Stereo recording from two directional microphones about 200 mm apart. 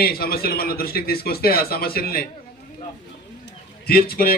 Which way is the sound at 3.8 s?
50° left (ahead or behind).